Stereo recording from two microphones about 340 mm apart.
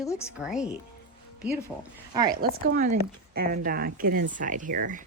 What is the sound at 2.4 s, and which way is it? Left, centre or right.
Speech, right.